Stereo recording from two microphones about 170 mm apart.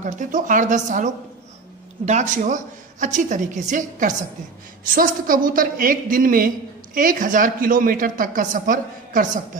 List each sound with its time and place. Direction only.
0.0 s a woman's voice: 50° right (ahead or behind)